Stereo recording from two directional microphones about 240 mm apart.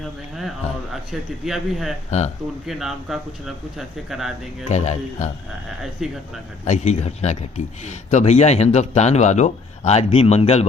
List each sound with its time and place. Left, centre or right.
0.0 s a sound: centre
1.1 s speech: centre
2.0 s speech: left
2.6 s speech: centre
4.7 s speech: left
5.8 s speech: centre
6.7 s speech: left